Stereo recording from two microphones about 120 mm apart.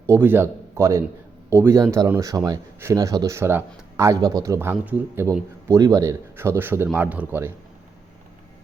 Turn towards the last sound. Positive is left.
turn(degrees=-20)  # may be behind; listen again after turning